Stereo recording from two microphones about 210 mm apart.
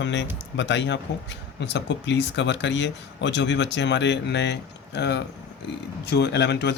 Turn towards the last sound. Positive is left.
turn(degrees=55)  # may be behind; listen again after turning